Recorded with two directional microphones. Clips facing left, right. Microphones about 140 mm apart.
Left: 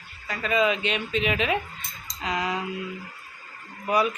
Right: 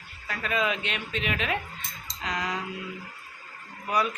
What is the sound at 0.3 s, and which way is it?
Speech, centre (ahead or behind).